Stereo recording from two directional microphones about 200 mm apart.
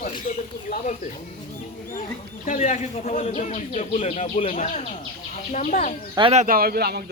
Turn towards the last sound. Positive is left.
turn(degrees=-50)  # may be behind; listen again after turning